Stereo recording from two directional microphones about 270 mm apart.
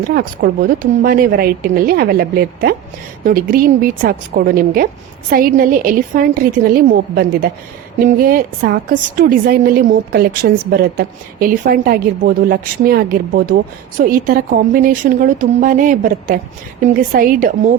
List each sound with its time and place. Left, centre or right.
0.0 s a woman's voice: right